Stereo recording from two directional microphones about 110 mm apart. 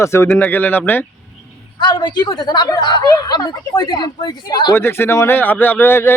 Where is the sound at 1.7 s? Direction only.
40° left (ahead or behind).